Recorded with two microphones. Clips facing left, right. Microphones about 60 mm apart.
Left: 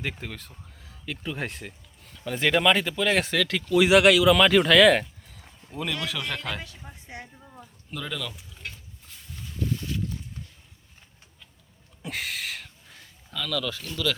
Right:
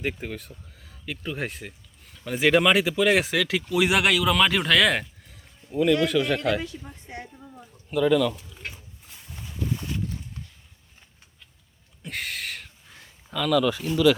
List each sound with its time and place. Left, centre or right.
0.0 s speech: centre
6.8 s a woman's voice: centre
7.6 s speech: centre
8.7 s boat: centre
9.7 s a sound: right
12.0 s a sound: centre